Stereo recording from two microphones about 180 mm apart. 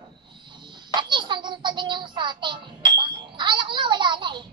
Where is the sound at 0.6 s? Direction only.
25° right (ahead or behind).